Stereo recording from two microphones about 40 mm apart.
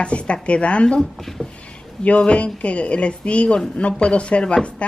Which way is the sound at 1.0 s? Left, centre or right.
Centre.